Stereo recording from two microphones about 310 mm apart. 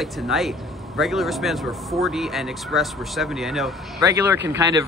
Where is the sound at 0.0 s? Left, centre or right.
Centre.